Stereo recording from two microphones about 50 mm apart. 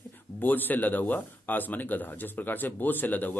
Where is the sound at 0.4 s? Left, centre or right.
Left.